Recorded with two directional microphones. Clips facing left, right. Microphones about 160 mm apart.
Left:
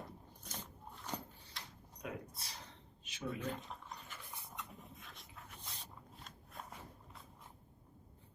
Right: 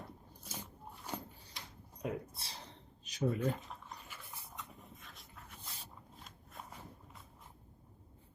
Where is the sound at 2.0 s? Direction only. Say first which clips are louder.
Right 6 dB; 30° right (ahead or behind).